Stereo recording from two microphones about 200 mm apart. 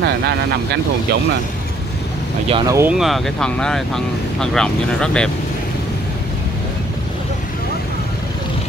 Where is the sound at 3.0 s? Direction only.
Centre (ahead or behind).